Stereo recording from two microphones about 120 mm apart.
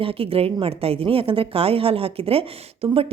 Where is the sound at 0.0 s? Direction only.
50° right (ahead or behind).